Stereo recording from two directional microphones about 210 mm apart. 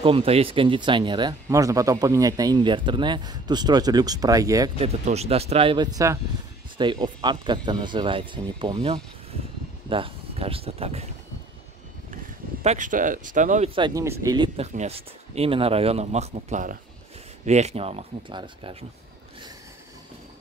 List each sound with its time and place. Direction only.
0.0 s speech: 25° right (ahead or behind)
4.7 s speech: 30° right (ahead or behind)
12.6 s speech: 35° right (ahead or behind)
13.7 s speech: 20° right (ahead or behind)
14.7 s speech: 30° right (ahead or behind)